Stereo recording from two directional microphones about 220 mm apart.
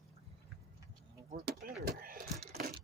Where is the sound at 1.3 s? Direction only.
40° right (ahead or behind).